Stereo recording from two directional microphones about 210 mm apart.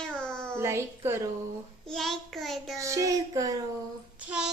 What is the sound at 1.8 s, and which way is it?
Speech, centre (ahead or behind).